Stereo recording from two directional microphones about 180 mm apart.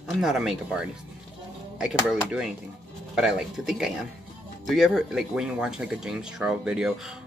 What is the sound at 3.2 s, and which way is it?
Speech, 5° right (ahead or behind).